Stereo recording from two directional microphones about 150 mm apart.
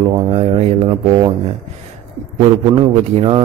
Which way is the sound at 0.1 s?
35° right (ahead or behind).